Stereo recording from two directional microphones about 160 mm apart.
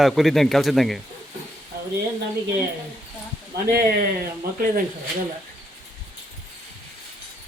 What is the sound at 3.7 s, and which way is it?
Speech, 70° right (ahead or behind).